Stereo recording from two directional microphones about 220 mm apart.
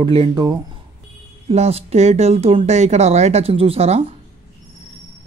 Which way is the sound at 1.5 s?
30° right (ahead or behind).